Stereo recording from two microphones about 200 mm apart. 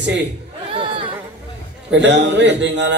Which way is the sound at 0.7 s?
25° right (ahead or behind).